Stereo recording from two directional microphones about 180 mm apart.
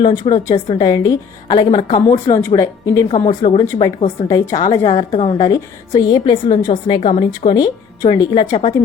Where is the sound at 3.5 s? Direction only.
15° left (ahead or behind).